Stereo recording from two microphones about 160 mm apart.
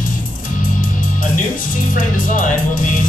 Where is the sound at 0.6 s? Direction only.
55° left (ahead or behind).